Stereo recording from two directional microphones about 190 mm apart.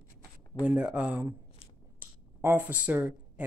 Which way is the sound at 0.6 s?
5° right (ahead or behind).